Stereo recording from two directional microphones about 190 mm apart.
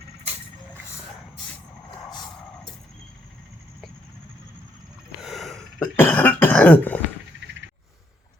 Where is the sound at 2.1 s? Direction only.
20° left (ahead or behind).